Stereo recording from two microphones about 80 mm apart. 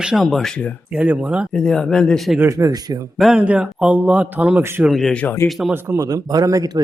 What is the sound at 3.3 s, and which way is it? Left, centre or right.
Speech, centre.